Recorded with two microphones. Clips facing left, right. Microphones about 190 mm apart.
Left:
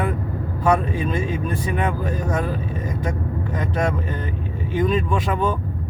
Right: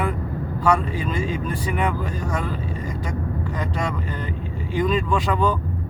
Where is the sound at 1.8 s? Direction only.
20° left (ahead or behind).